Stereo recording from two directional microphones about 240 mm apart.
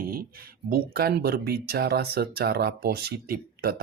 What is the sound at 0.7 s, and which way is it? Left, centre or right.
Speech, right.